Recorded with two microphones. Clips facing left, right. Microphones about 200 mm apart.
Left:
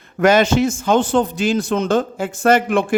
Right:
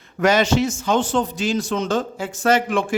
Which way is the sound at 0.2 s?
55° left (ahead or behind).